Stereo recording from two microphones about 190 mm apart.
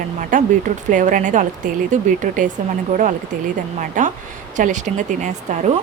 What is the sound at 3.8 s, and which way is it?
A woman's voice, 40° right (ahead or behind).